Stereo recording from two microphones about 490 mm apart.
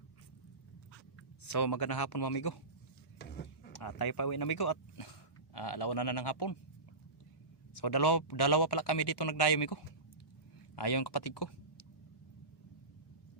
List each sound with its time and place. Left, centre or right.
1.6 s speech: left
3.8 s speech: left
7.8 s speech: left